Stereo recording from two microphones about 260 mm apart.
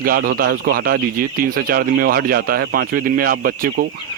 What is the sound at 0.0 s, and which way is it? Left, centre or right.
Speech, right.